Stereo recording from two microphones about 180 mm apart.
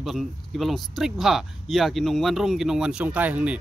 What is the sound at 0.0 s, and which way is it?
Speech, centre (ahead or behind).